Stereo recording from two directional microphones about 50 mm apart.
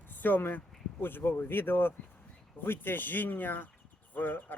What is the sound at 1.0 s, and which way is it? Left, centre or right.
Speech, left.